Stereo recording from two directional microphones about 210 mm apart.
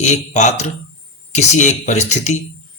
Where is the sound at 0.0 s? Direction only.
35° left (ahead or behind).